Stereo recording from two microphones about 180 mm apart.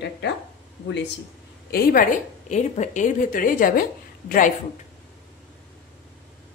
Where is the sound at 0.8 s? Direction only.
75° left (ahead or behind).